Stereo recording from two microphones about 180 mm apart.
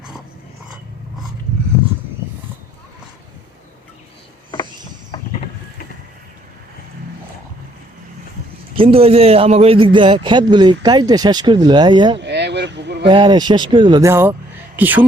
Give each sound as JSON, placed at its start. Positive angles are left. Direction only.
{"t": 8.7, "sound": "a man's voice", "side_deg": -30}
{"t": 12.1, "sound": "a sound", "side_deg": -70}
{"t": 13.1, "sound": "a man's voice", "side_deg": -25}